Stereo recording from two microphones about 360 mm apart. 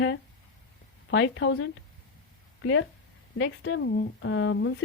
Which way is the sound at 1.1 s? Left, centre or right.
Left.